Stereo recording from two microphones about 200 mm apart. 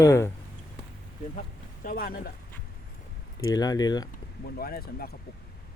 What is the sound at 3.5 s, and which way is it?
Speech, 20° left (ahead or behind).